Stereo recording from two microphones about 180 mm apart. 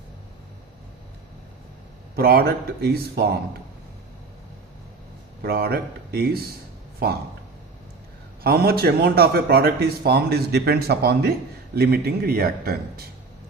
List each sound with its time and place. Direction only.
2.1 s speech: 60° right (ahead or behind)
5.4 s speech: 60° right (ahead or behind)
8.4 s speech: 60° right (ahead or behind)